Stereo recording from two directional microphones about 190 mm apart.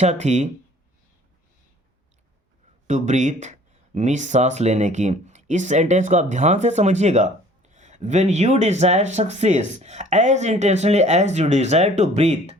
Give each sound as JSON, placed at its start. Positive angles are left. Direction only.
{"t": 0.0, "sound": "speech", "side_deg": -35}
{"t": 2.8, "sound": "speech", "side_deg": -40}